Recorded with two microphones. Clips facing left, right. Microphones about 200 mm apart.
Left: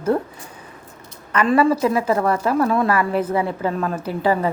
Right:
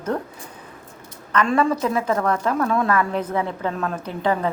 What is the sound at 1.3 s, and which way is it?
A woman's voice, 5° left (ahead or behind).